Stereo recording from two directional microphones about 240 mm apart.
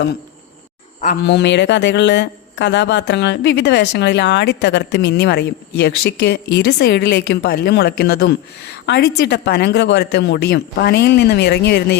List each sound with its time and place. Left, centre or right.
1.0 s a man's voice: left